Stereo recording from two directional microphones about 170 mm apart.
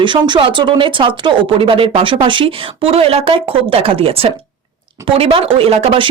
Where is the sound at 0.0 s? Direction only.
30° right (ahead or behind).